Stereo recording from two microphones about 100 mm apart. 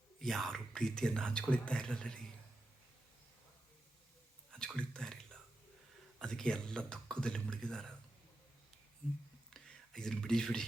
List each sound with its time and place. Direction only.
0.2 s speech: centre (ahead or behind)
4.5 s speech: 5° left (ahead or behind)
9.5 s whispering: 5° left (ahead or behind)